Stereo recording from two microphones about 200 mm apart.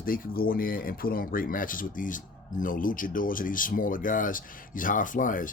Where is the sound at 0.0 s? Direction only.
45° left (ahead or behind).